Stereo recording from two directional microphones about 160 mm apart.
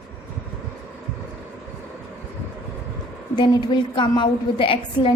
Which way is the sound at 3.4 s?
30° left (ahead or behind).